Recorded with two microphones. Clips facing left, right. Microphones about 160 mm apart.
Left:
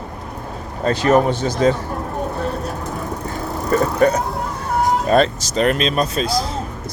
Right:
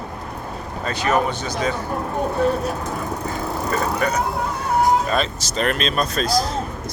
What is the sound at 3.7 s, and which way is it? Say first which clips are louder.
Speech: left 7 dB; 45° left (ahead or behind).